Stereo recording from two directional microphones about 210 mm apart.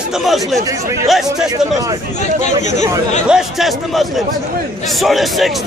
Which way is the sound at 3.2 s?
Centre (ahead or behind).